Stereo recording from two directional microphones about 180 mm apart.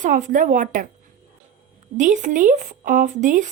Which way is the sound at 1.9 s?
45° right (ahead or behind).